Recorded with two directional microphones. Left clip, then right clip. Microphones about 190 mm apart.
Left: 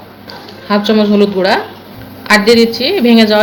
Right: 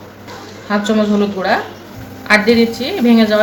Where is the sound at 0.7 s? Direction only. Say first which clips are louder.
Left 4 dB; 45° left (ahead or behind).